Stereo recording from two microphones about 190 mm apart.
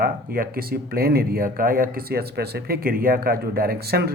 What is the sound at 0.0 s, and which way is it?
A man's voice, 50° right (ahead or behind).